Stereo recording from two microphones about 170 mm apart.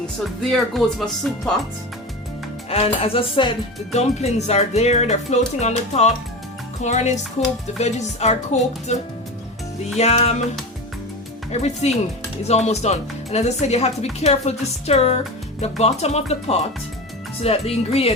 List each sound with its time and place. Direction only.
0.7 s music: centre (ahead or behind)
2.6 s speech: 35° left (ahead or behind)
6.8 s music: 45° left (ahead or behind)
7.8 s speech: 40° left (ahead or behind)
10.0 s speech: 40° left (ahead or behind)
11.6 s speech: 40° left (ahead or behind)